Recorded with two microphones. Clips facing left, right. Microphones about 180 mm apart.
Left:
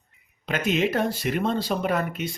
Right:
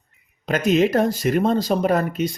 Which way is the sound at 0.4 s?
40° right (ahead or behind).